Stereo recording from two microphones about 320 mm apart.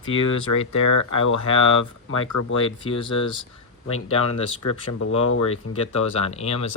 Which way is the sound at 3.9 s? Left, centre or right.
Left.